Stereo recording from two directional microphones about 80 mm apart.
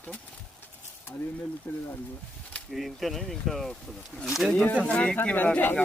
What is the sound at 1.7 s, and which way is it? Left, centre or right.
Speech, left.